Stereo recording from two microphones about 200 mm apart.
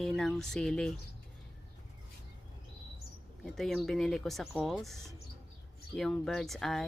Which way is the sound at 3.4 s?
Centre (ahead or behind).